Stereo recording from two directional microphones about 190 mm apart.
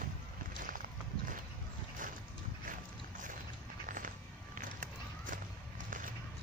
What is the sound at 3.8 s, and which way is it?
Music, 45° right (ahead or behind).